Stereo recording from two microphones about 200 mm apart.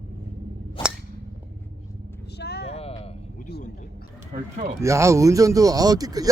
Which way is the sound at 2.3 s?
55° left (ahead or behind).